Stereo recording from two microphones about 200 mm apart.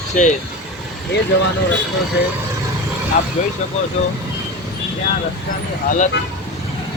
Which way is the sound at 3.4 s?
35° left (ahead or behind).